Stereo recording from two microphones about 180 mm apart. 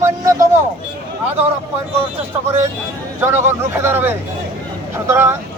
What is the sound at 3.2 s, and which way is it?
Speech, 15° right (ahead or behind).